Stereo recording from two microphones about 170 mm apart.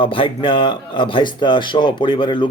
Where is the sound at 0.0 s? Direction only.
30° left (ahead or behind).